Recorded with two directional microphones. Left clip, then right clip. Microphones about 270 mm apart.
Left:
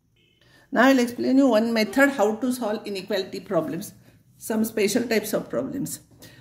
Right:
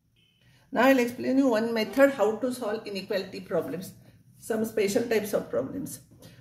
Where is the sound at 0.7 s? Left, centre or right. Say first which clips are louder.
Left 3 dB; left.